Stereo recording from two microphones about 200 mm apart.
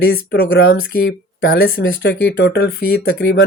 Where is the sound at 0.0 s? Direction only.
50° left (ahead or behind).